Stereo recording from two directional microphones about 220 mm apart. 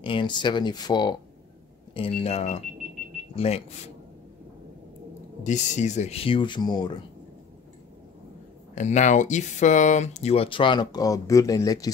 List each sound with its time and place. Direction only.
0.0 s speech: 20° left (ahead or behind)
5.4 s speech: 35° left (ahead or behind)
8.7 s speech: 35° left (ahead or behind); by 11.9 s 15° left (ahead or behind)